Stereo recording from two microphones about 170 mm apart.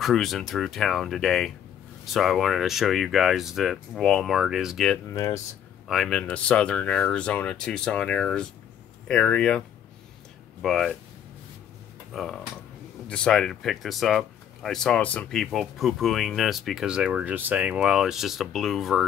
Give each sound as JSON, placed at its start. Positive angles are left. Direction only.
{"t": 0.0, "sound": "speech", "side_deg": 0}
{"t": 5.1, "sound": "speech", "side_deg": 20}
{"t": 5.9, "sound": "speech", "side_deg": 0}
{"t": 10.6, "sound": "speech", "side_deg": 0}
{"t": 12.1, "sound": "speech", "side_deg": 0}